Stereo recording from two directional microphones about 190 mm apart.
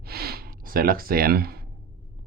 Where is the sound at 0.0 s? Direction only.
55° right (ahead or behind).